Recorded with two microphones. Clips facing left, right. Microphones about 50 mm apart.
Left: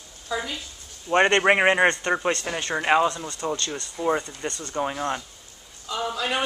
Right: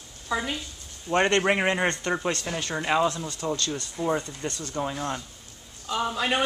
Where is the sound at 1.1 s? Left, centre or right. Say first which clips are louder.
Left 4 dB; left.